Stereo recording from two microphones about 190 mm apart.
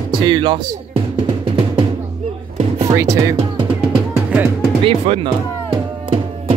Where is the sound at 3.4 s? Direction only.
25° right (ahead or behind).